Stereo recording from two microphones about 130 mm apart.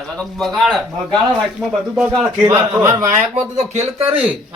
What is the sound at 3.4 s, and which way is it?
Speech, 60° right (ahead or behind).